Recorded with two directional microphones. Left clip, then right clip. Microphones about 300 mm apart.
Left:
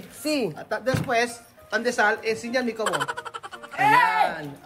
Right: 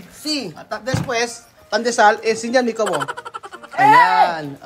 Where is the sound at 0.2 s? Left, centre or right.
Centre; by 2.8 s right.